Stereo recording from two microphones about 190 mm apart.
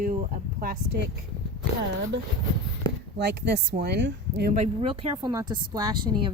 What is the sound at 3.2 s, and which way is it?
Speech, 60° right (ahead or behind).